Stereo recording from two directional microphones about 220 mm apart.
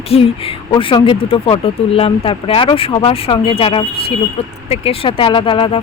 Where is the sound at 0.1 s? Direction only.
25° left (ahead or behind).